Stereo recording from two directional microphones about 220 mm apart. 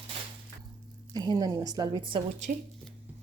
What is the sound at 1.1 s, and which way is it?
A woman's voice, 20° right (ahead or behind).